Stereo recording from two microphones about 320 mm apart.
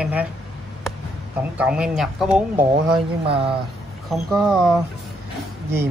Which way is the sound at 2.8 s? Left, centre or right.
Centre.